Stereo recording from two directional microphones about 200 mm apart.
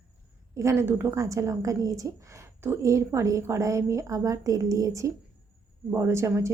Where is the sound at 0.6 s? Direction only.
15° right (ahead or behind).